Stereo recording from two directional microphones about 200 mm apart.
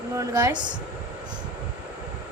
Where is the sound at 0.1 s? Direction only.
15° right (ahead or behind).